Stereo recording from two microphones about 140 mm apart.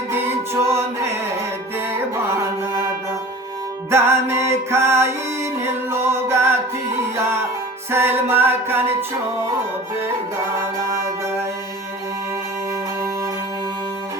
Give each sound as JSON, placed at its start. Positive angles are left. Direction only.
{"t": 0.1, "sound": "music", "side_deg": -20}
{"t": 3.9, "sound": "music", "side_deg": -20}
{"t": 7.9, "sound": "music", "side_deg": -15}